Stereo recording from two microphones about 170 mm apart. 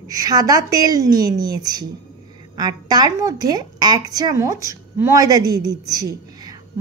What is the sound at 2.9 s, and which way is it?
A woman's voice, 20° right (ahead or behind).